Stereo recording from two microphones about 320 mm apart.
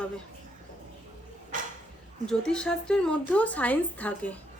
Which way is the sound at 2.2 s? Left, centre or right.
Centre.